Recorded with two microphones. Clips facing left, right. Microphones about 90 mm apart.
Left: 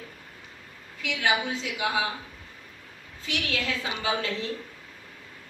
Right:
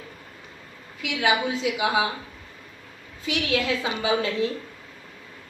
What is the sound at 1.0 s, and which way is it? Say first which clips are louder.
Speech: right 3 dB; 15° right (ahead or behind).